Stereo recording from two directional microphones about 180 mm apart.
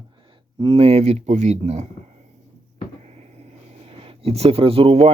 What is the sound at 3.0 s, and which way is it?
Speech, 35° right (ahead or behind).